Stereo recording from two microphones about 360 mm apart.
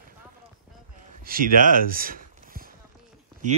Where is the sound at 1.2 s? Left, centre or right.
Right.